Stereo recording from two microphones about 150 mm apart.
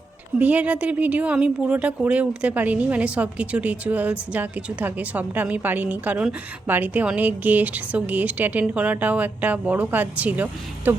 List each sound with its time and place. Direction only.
0.3 s speech: 10° right (ahead or behind)